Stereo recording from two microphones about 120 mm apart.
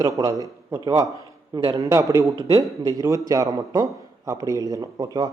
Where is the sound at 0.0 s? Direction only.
25° right (ahead or behind).